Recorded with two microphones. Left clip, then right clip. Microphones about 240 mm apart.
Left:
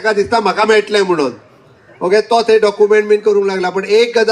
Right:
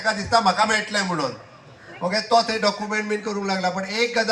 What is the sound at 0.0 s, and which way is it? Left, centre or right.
Speech, left.